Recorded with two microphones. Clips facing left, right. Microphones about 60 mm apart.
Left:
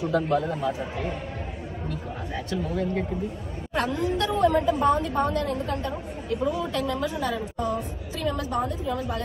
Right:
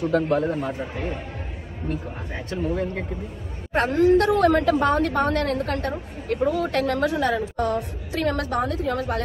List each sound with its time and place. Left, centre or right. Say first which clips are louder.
0.1 s speech: right 2 dB; right
2.5 s a woman's voice: right 2 dB; right